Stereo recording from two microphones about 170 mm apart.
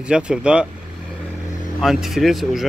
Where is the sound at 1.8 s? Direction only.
Centre (ahead or behind).